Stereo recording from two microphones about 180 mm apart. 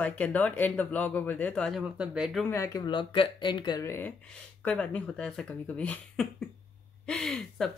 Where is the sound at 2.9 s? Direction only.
25° left (ahead or behind); by 7.7 s centre (ahead or behind).